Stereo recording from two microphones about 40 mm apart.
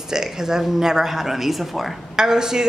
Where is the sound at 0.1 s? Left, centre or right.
Centre.